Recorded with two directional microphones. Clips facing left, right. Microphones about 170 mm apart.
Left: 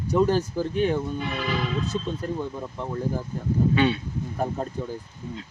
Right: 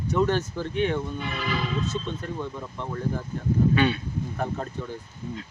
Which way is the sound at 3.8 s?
25° left (ahead or behind).